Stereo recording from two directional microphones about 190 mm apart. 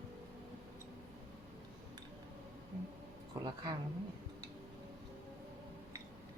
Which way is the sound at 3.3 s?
20° right (ahead or behind).